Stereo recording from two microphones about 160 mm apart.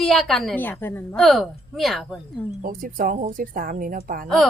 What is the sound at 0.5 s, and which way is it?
Speech, 10° left (ahead or behind).